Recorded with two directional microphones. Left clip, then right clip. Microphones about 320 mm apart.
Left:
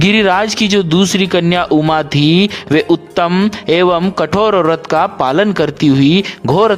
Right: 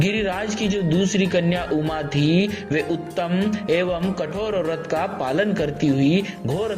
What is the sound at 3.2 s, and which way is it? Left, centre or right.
Speech, left.